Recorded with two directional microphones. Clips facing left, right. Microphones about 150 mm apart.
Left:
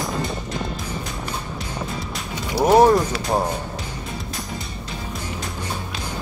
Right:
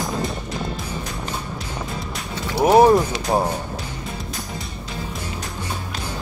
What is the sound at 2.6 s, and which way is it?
Speech, 10° right (ahead or behind).